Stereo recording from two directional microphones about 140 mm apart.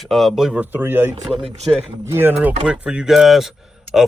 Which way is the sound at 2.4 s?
10° right (ahead or behind).